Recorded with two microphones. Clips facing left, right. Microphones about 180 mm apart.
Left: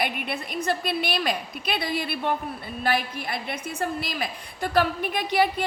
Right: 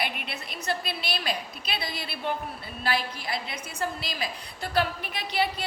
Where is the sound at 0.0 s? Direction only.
50° left (ahead or behind).